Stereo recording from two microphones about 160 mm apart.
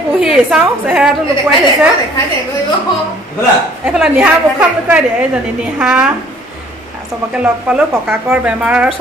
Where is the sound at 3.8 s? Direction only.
5° right (ahead or behind).